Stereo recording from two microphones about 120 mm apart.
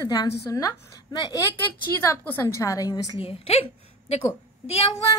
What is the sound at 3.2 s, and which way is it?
A woman's voice, 55° left (ahead or behind).